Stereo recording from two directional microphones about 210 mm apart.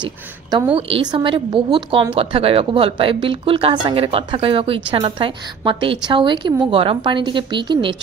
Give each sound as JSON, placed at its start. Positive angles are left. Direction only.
{"t": 0.0, "sound": "a woman's voice", "side_deg": -20}